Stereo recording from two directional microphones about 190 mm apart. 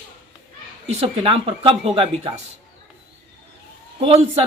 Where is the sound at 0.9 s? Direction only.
35° right (ahead or behind).